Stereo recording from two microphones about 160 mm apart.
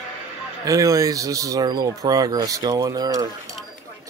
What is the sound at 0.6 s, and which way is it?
Speech, 20° right (ahead or behind).